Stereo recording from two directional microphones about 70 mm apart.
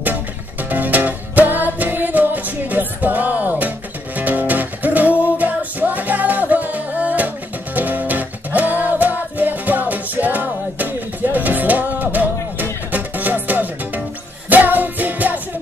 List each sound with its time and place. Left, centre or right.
0.0 s music: right